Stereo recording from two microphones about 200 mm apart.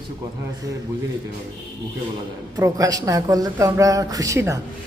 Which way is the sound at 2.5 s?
15° right (ahead or behind).